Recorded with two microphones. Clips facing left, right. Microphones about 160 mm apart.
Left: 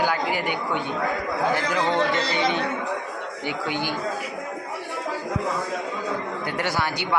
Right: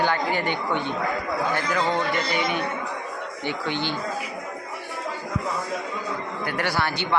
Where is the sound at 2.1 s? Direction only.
25° left (ahead or behind).